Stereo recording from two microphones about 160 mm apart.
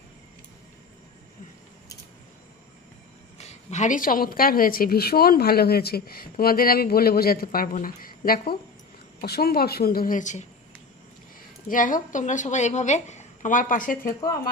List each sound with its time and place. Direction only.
3.3 s a woman's voice: 45° left (ahead or behind); by 8.5 s 65° left (ahead or behind)
9.2 s a woman's voice: 80° left; by 10.4 s 50° left (ahead or behind)
11.7 s a woman's voice: 55° left (ahead or behind)